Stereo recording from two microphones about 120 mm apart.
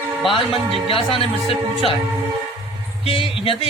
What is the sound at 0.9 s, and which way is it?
Speech, 50° left (ahead or behind).